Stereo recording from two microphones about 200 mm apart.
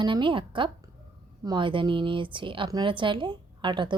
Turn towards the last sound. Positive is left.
turn(degrees=-25)  # may be behind; listen again after turning